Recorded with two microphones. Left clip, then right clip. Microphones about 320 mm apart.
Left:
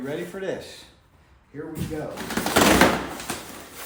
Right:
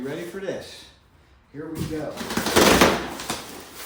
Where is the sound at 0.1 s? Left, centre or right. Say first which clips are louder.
Left 1 dB; centre.